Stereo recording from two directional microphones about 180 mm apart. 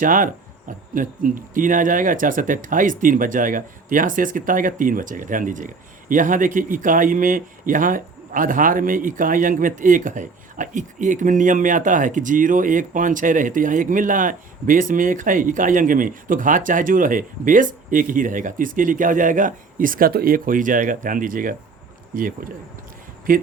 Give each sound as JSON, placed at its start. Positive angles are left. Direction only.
{"t": 0.0, "sound": "speech", "side_deg": -50}